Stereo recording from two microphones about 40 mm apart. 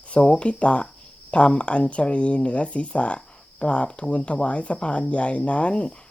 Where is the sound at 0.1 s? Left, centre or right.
Left.